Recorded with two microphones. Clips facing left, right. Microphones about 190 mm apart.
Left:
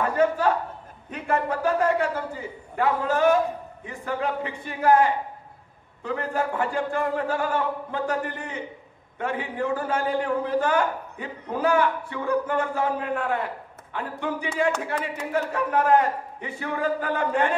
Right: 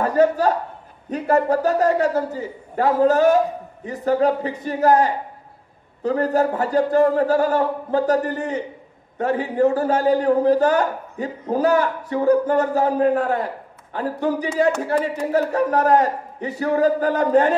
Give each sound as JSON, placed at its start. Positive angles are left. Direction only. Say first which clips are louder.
{"t": 0.0, "sound": "a man's voice", "louder": "right 5 dB", "side_deg": -40}